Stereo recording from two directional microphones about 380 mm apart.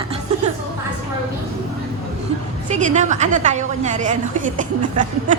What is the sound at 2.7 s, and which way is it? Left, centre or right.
A woman's voice, centre.